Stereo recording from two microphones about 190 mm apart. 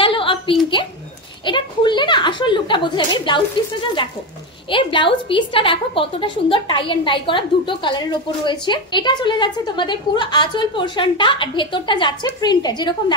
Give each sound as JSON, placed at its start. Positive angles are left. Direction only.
{"t": 0.0, "sound": "a sound", "side_deg": 25}
{"t": 1.4, "sound": "a woman's voice", "side_deg": 25}
{"t": 4.6, "sound": "a woman's voice", "side_deg": 25}